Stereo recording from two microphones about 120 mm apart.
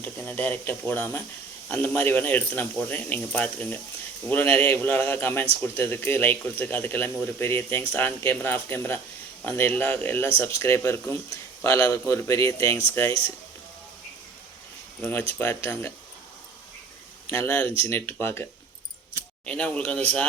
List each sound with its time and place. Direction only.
0.0 s speech: 15° left (ahead or behind)
15.3 s speech: 20° left (ahead or behind)
17.2 s speech: 20° left (ahead or behind)
19.5 s speech: 10° left (ahead or behind)